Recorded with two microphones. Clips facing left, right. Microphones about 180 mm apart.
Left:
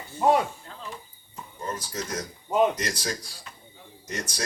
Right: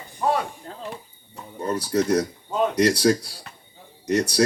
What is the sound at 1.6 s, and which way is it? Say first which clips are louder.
Speech: right 11 dB; 70° right (ahead or behind).